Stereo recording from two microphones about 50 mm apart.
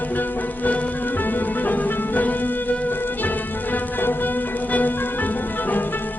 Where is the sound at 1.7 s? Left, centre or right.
Left.